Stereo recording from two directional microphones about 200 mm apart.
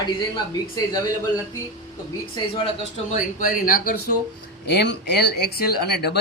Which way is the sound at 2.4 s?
20° left (ahead or behind).